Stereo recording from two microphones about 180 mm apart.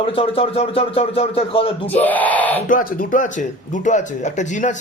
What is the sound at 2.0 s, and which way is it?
Speech, 10° left (ahead or behind).